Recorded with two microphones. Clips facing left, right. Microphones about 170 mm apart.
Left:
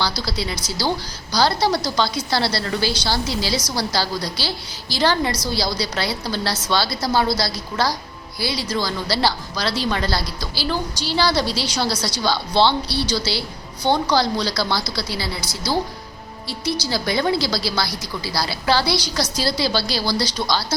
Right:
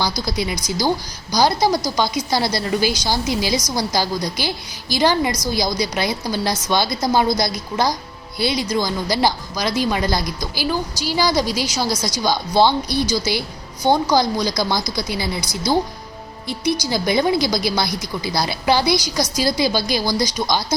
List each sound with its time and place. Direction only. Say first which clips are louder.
0.2 s a woman's voice: right 3 dB; 15° right (ahead or behind)
16.8 s a woman's voice: right 2 dB; 15° right (ahead or behind)